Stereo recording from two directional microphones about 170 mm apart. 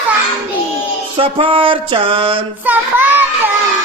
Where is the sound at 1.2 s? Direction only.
35° right (ahead or behind).